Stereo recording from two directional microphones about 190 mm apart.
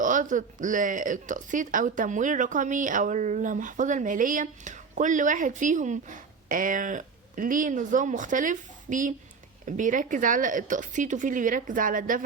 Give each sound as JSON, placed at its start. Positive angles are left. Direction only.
{"t": 0.0, "sound": "speech", "side_deg": -45}